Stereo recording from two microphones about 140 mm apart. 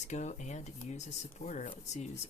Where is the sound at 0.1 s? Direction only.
55° left (ahead or behind).